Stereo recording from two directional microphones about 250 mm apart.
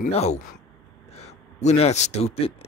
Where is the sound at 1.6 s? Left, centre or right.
Left.